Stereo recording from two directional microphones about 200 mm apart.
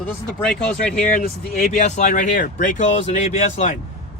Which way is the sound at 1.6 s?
35° left (ahead or behind).